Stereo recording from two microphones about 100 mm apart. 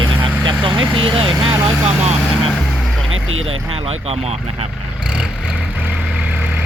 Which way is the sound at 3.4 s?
85° right.